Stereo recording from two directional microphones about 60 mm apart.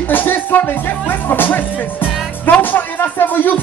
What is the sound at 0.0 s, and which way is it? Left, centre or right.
Music, left.